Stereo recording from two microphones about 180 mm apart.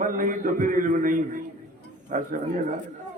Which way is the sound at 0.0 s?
45° right (ahead or behind).